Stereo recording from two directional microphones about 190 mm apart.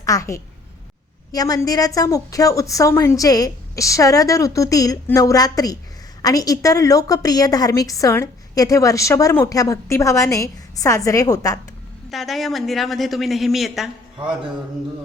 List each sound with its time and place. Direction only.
0.0 s a woman's voice: 15° left (ahead or behind)
12.1 s speech: centre (ahead or behind)